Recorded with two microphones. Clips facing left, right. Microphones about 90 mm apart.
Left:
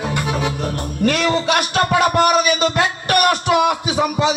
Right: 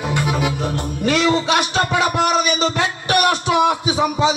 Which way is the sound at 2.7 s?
50° left (ahead or behind).